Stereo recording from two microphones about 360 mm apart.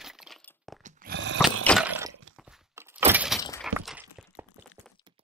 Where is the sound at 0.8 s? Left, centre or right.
Right.